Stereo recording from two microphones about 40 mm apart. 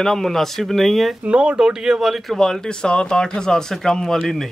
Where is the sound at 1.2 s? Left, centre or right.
Right.